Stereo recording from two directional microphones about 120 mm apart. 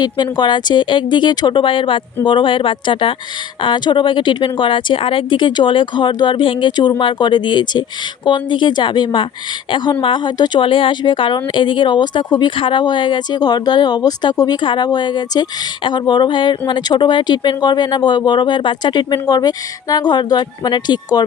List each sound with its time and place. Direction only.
0.0 s speech: 35° left (ahead or behind)